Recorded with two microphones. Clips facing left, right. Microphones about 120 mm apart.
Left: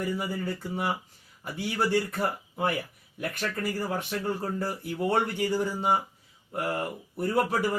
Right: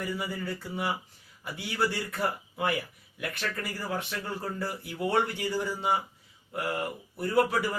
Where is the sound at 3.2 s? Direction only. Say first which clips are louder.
Left 3 dB; 45° left (ahead or behind).